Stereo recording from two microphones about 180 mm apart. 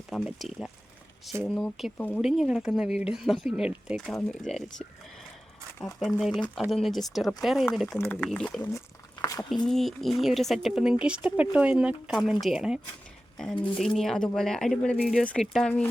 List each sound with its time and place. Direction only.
0.1 s speech: centre (ahead or behind)
7.9 s speech: 10° left (ahead or behind)
9.2 s speech: 20° left (ahead or behind)
9.6 s speech: centre (ahead or behind)